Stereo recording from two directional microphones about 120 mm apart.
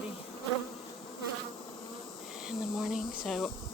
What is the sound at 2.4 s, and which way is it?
Speech, 5° right (ahead or behind).